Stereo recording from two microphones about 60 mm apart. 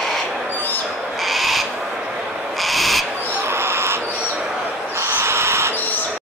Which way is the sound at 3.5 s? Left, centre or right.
Right.